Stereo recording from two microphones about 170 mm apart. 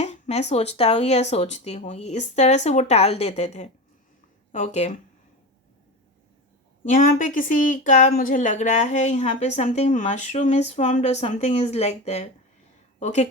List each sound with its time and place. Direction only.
0.0 s speech: 40° left (ahead or behind)
6.9 s a woman's voice: 50° left (ahead or behind)